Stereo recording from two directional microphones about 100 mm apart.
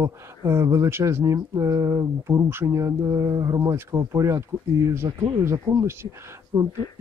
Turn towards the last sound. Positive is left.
turn(degrees=-40)  # may be behind; listen again after turning